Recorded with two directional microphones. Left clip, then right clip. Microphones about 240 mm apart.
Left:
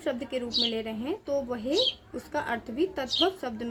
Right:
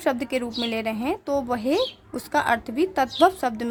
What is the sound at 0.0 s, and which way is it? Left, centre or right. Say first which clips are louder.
A woman's voice: right 7 dB; right.